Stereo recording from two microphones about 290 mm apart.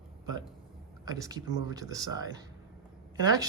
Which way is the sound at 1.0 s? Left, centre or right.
Centre.